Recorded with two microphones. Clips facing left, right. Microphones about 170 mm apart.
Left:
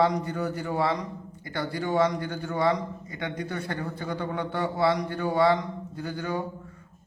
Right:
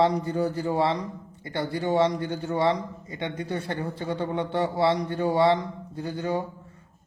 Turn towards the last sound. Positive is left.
turn(degrees=-25)  # may be behind; listen again after turning